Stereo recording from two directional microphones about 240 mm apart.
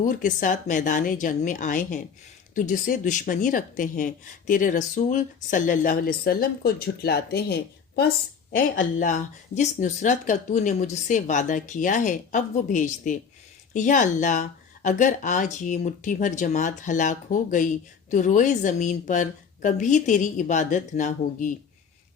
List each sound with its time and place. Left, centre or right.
0.0 s speech: left